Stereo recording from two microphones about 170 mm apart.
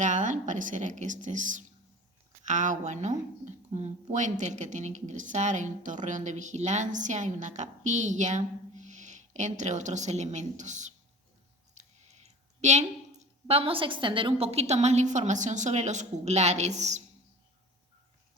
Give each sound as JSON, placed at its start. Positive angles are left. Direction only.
{"t": 0.0, "sound": "speech", "side_deg": -45}